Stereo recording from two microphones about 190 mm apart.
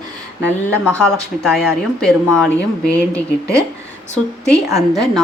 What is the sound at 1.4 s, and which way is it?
Speech, 5° left (ahead or behind).